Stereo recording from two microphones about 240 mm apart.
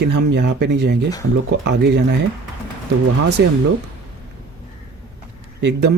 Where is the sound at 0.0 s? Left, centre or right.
Right.